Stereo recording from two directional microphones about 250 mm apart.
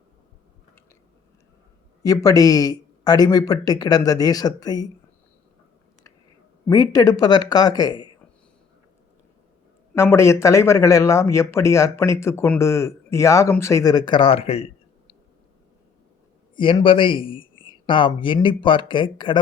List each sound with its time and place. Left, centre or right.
2.0 s speech: centre
6.7 s speech: centre
9.9 s speech: centre
16.6 s speech: centre